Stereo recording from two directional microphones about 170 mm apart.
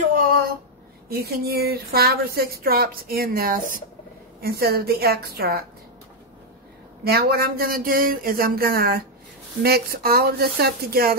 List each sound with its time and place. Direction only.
1.0 s speech: 65° right (ahead or behind)
4.4 s speech: 65° right (ahead or behind)
7.1 s speech: 65° right (ahead or behind)